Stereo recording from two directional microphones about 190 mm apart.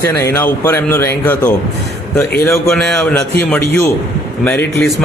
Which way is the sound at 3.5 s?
15° left (ahead or behind).